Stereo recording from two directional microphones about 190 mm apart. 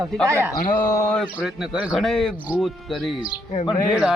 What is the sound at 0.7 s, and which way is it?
Speech, 45° left (ahead or behind).